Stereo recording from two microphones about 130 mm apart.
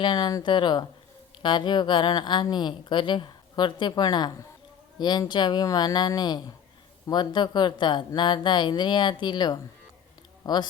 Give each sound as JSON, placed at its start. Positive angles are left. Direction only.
{"t": 0.0, "sound": "a woman's voice", "side_deg": 35}